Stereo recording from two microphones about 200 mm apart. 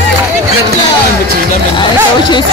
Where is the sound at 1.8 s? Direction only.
20° left (ahead or behind).